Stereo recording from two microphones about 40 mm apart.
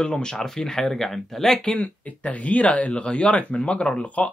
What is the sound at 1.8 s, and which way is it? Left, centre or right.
Speech, left.